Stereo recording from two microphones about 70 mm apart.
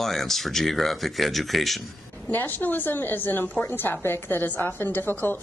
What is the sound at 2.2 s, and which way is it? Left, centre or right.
A woman's voice, left.